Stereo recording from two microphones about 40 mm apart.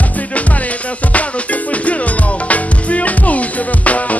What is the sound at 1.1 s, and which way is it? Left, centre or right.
Music, left.